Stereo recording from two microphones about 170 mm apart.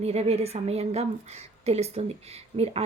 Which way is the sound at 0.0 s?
35° right (ahead or behind).